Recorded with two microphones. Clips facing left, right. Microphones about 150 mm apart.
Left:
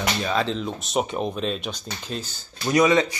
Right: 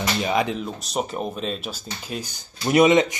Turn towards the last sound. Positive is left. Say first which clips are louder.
# right 3 dB
turn(degrees=-20)  # may be behind; listen again after turning